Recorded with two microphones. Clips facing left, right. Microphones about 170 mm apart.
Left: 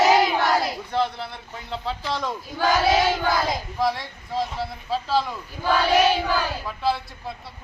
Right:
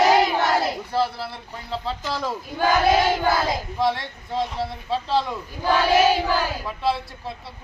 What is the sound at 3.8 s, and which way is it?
Speech, centre (ahead or behind).